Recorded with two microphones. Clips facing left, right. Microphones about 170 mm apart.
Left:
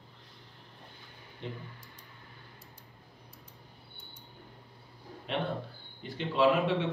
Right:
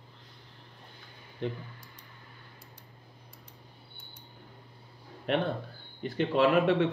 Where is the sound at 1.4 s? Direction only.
60° right (ahead or behind).